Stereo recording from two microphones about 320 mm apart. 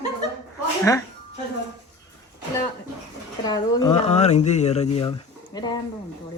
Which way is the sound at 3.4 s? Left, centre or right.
Centre.